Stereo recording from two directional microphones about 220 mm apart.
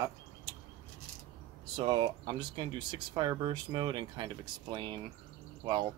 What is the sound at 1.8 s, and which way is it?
Speech, 20° right (ahead or behind).